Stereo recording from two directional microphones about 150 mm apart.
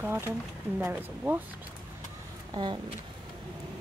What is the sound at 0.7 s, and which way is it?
Speech, 15° right (ahead or behind).